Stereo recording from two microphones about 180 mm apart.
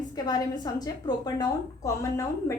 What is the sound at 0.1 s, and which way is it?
A woman's voice, 20° left (ahead or behind).